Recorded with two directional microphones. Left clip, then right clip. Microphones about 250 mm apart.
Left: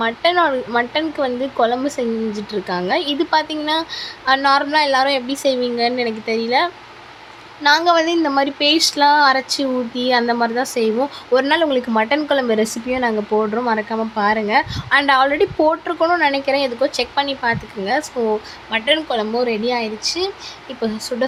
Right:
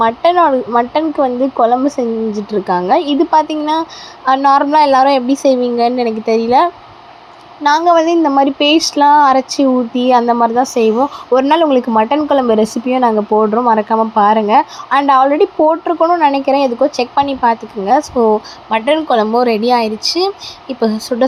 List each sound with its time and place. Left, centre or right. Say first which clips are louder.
0.0 s a woman's voice: right 6 dB; centre